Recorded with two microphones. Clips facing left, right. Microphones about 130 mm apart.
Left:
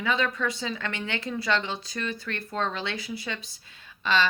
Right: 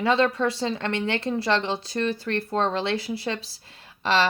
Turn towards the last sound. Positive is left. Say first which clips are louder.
# right 3 dB
turn(degrees=-30)  # may be behind; listen again after turning